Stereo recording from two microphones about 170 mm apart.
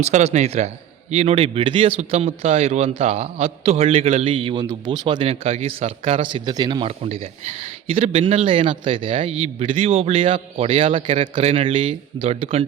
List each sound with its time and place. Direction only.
0.0 s a man's voice: 40° right (ahead or behind)